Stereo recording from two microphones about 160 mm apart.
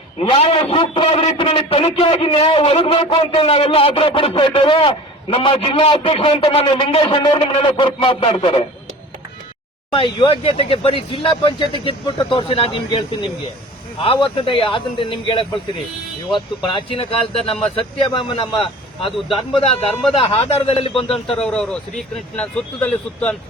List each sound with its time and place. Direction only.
0.2 s a man's voice: 35° left (ahead or behind)
9.9 s a man's voice: 35° left (ahead or behind)
16.7 s a man's voice: 35° left (ahead or behind)
21.2 s speech: 5° left (ahead or behind)